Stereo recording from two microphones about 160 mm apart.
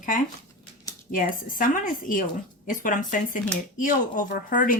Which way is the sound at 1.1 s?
55° left (ahead or behind).